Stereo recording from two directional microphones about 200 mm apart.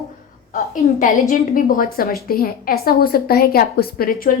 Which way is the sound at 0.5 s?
40° left (ahead or behind).